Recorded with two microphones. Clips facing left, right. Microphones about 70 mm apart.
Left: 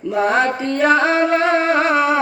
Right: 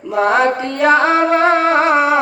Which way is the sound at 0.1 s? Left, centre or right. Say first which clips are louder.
Right 3 dB; centre.